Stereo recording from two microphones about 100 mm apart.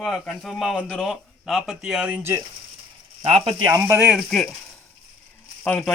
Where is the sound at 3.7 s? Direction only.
25° right (ahead or behind).